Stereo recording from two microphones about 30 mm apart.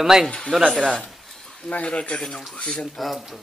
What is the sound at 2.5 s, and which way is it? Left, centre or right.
Speech, left.